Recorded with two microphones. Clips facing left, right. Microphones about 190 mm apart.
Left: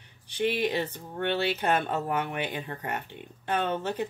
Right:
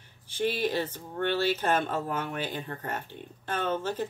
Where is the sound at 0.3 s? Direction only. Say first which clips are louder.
Left 2 dB; 65° left (ahead or behind).